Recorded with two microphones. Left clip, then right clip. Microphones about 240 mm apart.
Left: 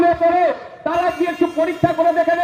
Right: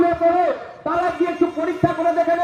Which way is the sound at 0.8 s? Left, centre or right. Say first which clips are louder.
Left 2 dB; left.